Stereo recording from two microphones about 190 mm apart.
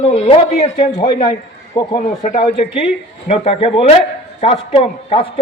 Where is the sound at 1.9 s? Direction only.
40° left (ahead or behind).